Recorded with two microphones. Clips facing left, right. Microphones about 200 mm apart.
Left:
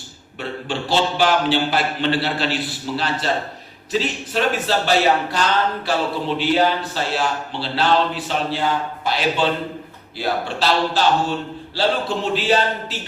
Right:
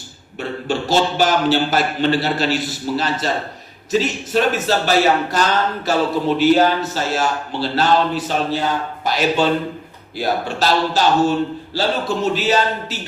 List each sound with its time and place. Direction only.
0.3 s a man's voice: 45° right (ahead or behind)